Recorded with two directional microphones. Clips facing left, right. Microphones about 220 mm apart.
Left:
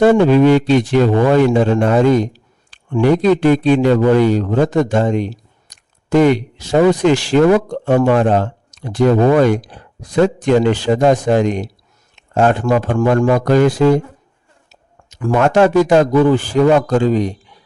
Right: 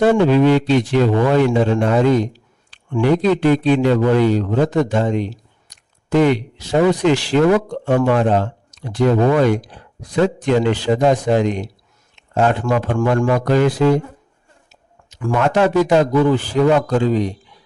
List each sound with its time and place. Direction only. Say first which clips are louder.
0.3 s speech: left 3 dB; 45° left (ahead or behind)
6.1 s speech: left 3 dB; 45° left (ahead or behind)
14.7 s a sound: left 2 dB; 40° left (ahead or behind)
15.9 s speech: left 3 dB; 50° left (ahead or behind)